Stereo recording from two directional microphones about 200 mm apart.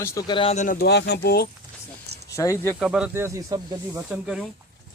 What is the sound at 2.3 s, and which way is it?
Speech, 15° left (ahead or behind).